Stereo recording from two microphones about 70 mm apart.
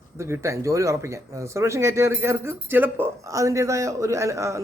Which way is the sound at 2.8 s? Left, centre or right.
Right.